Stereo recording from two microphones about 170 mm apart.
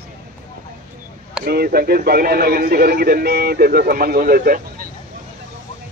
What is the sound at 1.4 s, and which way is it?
A man's voice, 65° right (ahead or behind).